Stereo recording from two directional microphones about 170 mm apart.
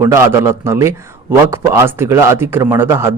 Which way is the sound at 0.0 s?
15° right (ahead or behind).